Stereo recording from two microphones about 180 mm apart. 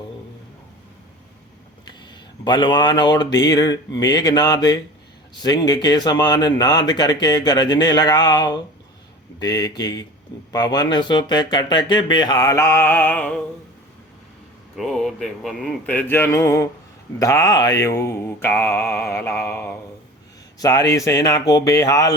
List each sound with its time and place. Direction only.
2.4 s speech: 25° left (ahead or behind); by 13.4 s 10° left (ahead or behind)
14.8 s mantra: centre (ahead or behind)
20.6 s speech: 20° left (ahead or behind)